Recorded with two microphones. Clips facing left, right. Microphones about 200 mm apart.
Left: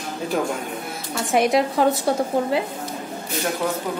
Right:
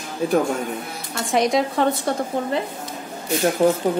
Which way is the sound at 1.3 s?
Centre (ahead or behind).